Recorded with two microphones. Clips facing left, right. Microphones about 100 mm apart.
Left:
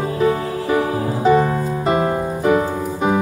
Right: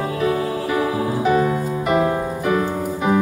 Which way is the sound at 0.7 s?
30° left (ahead or behind).